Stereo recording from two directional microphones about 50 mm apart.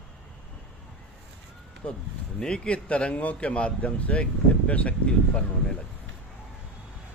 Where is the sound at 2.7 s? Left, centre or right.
Left.